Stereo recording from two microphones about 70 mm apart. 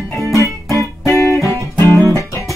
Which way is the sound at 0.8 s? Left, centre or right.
Left.